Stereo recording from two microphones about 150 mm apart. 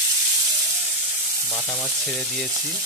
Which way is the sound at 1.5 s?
5° left (ahead or behind).